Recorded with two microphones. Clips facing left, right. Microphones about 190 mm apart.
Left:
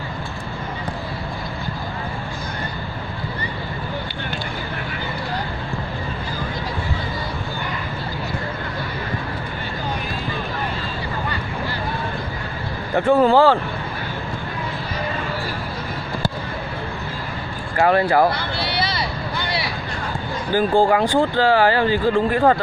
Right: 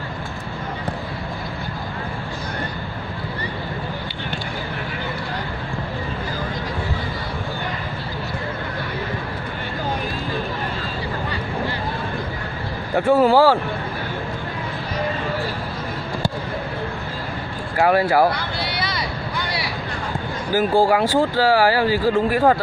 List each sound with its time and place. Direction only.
12.9 s speech: 10° right (ahead or behind)
17.7 s speech: 5° right (ahead or behind)
18.3 s a sound: 30° left (ahead or behind)
20.5 s speech: 5° right (ahead or behind)